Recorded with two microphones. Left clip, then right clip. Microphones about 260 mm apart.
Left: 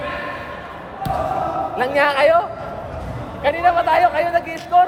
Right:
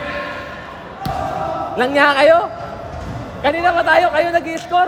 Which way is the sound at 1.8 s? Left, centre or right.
Right.